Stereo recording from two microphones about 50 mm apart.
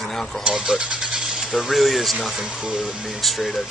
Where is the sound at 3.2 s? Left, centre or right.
Centre.